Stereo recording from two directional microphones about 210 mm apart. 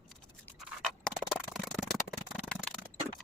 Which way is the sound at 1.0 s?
Centre (ahead or behind).